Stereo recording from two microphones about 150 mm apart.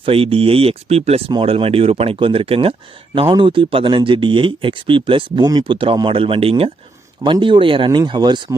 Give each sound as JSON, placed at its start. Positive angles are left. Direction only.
{"t": 0.0, "sound": "speech", "side_deg": -40}